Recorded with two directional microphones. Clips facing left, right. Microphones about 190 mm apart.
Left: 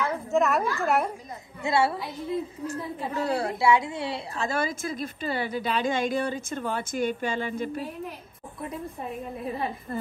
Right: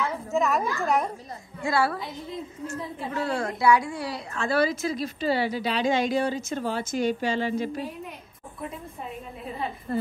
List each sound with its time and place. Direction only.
0.0 s a woman's voice: centre (ahead or behind)
1.6 s a woman's voice: 25° left (ahead or behind)
2.6 s a woman's voice: 40° left (ahead or behind)
4.4 s a woman's voice: 45° left (ahead or behind)